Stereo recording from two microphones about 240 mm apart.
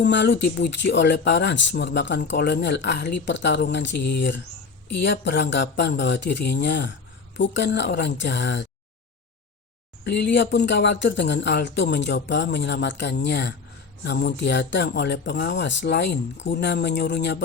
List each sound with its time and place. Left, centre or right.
0.0 s speech: left
10.0 s speech: left